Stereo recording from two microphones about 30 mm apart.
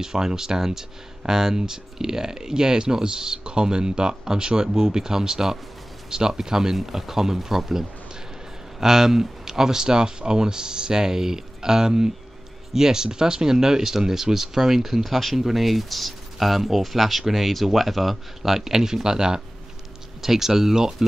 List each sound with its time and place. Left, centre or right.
0.0 s speech: right; by 18.6 s centre
18.6 s speech: centre
20.2 s speech: centre